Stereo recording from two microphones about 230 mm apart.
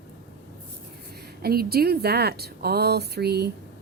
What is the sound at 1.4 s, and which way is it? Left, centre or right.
A woman's voice, right.